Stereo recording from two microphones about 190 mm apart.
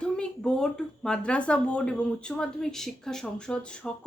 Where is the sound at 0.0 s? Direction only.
5° left (ahead or behind).